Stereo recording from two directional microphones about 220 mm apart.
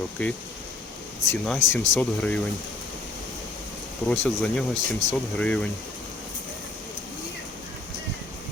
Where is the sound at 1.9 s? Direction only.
5° left (ahead or behind).